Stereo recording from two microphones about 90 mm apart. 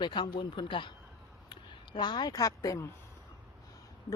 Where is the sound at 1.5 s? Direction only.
60° left (ahead or behind).